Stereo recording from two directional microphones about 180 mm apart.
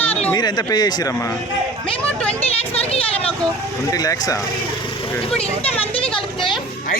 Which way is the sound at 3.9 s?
20° left (ahead or behind).